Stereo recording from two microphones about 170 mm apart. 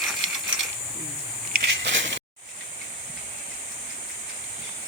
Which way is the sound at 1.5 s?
80° right.